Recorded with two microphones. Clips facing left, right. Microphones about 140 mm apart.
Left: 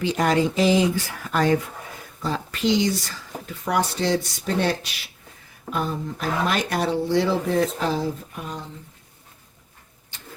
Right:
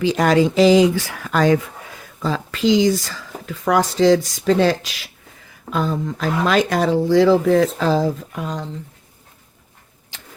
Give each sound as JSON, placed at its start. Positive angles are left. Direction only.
{"t": 0.0, "sound": "speech", "side_deg": -90}
{"t": 2.8, "sound": "speech", "side_deg": -90}
{"t": 10.1, "sound": "rodents", "side_deg": -90}